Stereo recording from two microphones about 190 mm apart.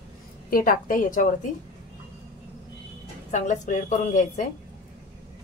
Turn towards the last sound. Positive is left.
turn(degrees=40)  # may be behind; listen again after turning